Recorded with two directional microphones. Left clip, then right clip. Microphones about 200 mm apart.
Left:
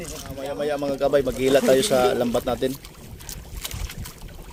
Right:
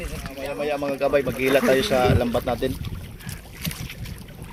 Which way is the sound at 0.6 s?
15° left (ahead or behind).